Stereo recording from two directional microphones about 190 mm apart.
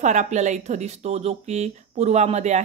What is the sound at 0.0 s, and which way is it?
Speech, 40° right (ahead or behind).